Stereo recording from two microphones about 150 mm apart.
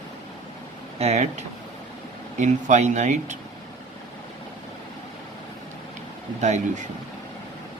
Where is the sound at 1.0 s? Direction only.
45° right (ahead or behind).